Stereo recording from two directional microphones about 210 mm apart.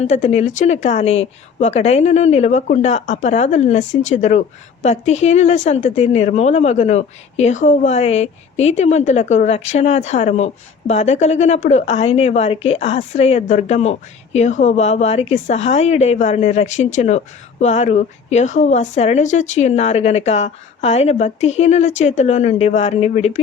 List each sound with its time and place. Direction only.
0.0 s a woman's voice: 30° left (ahead or behind)